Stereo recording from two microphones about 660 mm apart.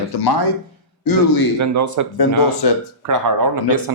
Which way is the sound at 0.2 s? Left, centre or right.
Left.